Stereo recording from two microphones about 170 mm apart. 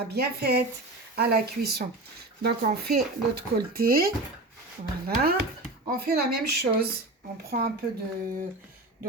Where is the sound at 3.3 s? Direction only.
65° right (ahead or behind).